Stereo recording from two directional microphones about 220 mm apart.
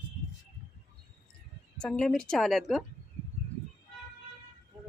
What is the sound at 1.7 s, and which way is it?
A woman's voice, 5° left (ahead or behind).